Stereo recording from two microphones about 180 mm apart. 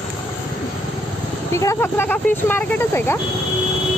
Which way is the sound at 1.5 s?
15° left (ahead or behind).